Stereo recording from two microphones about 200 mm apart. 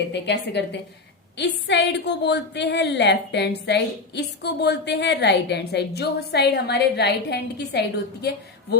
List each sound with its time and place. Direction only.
0.1 s a woman's voice: 60° left (ahead or behind)